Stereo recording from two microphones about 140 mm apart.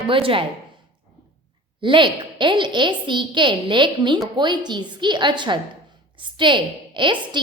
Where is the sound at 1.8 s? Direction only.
35° right (ahead or behind).